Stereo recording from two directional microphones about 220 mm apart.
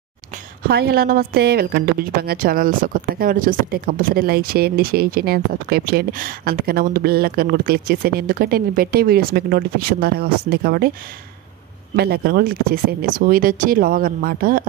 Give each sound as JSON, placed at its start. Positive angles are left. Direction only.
{"t": 0.7, "sound": "speech", "side_deg": -45}
{"t": 11.9, "sound": "speech", "side_deg": -45}